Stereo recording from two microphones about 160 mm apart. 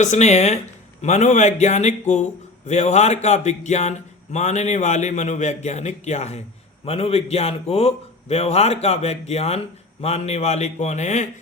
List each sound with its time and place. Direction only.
0.0 s a man's voice: 45° left (ahead or behind)